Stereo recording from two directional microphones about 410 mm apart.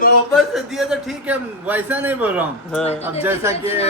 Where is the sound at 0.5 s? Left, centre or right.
Centre.